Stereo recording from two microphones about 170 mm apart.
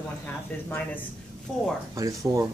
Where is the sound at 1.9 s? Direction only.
20° right (ahead or behind).